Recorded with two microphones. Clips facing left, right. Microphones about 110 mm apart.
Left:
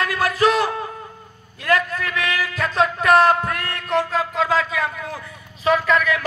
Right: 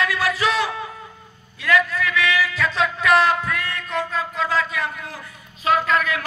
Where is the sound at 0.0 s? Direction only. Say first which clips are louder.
Left 3 dB; 45° left (ahead or behind); by 4.5 s 90° left.